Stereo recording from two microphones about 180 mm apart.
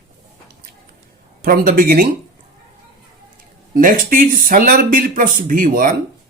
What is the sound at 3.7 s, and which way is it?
Speech, 50° right (ahead or behind).